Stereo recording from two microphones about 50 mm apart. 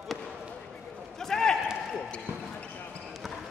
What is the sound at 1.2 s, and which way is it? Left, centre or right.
Run, centre.